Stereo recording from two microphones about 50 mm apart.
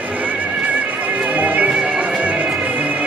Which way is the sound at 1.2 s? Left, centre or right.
Right.